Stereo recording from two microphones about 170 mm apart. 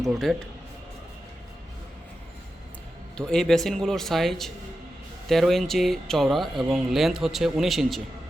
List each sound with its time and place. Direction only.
0.1 s speech: centre (ahead or behind)
3.2 s speech: 5° left (ahead or behind)